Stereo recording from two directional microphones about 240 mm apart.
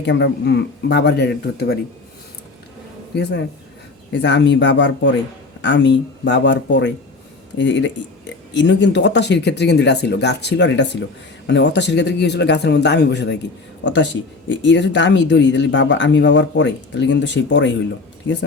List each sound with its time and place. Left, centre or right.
0.0 s speech: left
3.2 s speech: left